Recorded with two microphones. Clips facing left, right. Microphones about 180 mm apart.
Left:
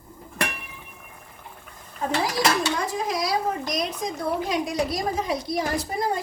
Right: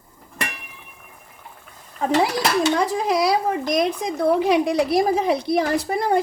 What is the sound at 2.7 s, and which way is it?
Speech, 70° right (ahead or behind).